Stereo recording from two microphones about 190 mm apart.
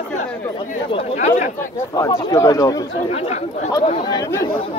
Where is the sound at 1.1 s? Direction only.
40° left (ahead or behind).